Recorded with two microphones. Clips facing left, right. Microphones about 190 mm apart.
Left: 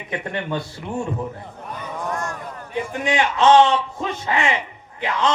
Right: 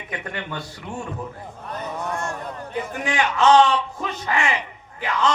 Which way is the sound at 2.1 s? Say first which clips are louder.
Even; 25° right (ahead or behind).